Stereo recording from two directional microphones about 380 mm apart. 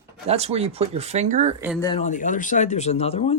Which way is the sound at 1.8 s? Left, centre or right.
Centre.